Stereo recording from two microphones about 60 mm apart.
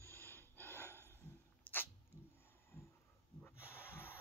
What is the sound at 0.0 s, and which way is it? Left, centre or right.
Gasp, left.